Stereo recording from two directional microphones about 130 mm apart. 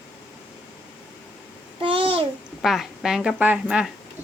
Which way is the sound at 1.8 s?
45° right (ahead or behind).